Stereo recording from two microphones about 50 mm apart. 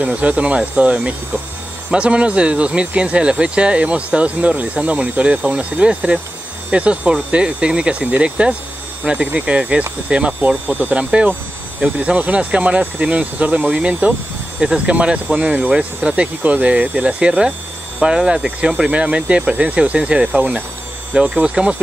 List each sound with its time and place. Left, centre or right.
0.0 s speech: right
20.3 s speech: right
21.1 s speech: right